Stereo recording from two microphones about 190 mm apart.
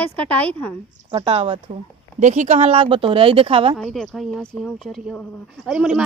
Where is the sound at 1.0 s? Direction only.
30° right (ahead or behind).